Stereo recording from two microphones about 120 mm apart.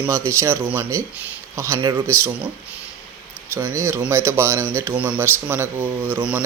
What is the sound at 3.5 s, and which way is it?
Speech, 20° right (ahead or behind).